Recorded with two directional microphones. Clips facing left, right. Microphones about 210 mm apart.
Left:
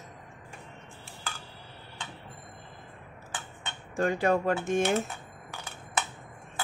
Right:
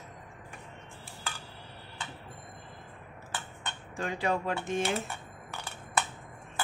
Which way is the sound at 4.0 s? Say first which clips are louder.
Left 6 dB; 50° left (ahead or behind).